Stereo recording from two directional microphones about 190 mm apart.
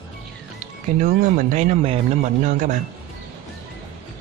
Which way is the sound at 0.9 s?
45° right (ahead or behind).